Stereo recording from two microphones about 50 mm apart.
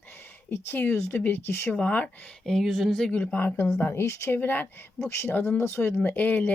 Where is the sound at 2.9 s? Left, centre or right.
Centre.